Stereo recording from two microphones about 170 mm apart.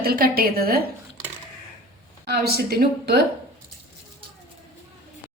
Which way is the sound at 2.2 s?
70° right (ahead or behind).